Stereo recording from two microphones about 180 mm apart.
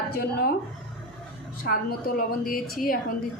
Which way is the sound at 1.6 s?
55° left (ahead or behind).